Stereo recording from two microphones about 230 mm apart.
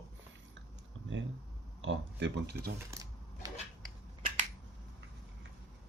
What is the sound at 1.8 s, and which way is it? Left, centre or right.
Speech, right.